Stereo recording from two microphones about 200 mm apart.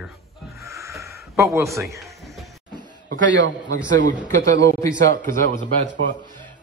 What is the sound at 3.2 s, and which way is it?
Speech, 65° right (ahead or behind).